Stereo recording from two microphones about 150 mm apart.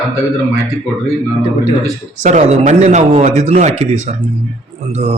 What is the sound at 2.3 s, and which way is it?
Speech, 50° right (ahead or behind).